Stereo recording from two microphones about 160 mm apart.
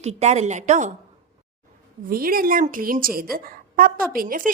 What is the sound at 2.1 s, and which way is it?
A woman's voice, 65° right (ahead or behind).